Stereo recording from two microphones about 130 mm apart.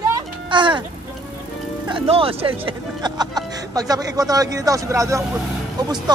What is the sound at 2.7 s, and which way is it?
Speech, 35° right (ahead or behind).